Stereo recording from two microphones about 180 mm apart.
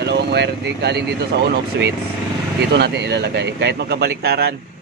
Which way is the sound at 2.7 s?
70° right (ahead or behind).